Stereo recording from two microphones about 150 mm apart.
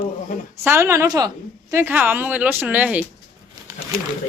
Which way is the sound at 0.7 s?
15° right (ahead or behind).